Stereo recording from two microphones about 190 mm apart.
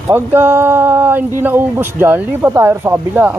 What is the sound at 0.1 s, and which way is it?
Speech, 10° right (ahead or behind).